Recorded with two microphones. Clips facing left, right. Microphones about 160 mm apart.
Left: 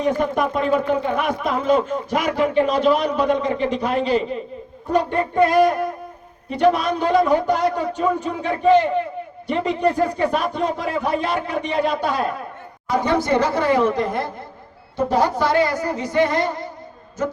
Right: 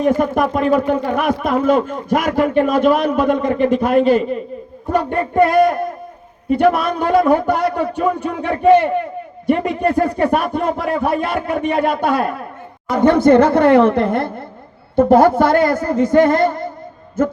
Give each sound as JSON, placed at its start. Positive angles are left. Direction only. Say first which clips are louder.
{"t": 0.0, "sound": "speech", "louder": "right 4 dB", "side_deg": -50}